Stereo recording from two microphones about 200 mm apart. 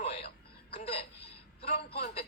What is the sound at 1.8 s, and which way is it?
Speech, 50° left (ahead or behind).